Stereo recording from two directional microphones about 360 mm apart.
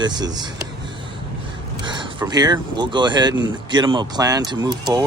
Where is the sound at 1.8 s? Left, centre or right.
Centre.